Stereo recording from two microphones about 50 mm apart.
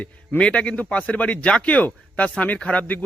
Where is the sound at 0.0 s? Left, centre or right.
Left.